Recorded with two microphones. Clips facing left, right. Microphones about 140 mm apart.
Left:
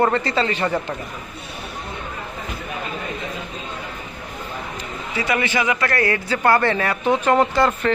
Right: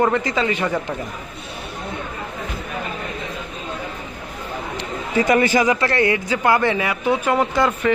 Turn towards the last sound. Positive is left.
turn(degrees=-10)  # may be behind; listen again after turning